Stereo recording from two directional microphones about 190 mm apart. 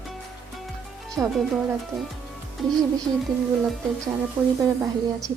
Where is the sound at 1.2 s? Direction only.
5° right (ahead or behind).